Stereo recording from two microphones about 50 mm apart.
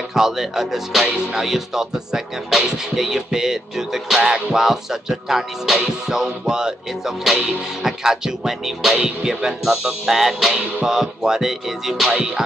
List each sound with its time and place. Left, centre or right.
0.1 s music: centre